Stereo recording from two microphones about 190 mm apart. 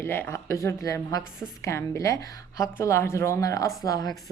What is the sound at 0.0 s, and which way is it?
Speech, 10° left (ahead or behind).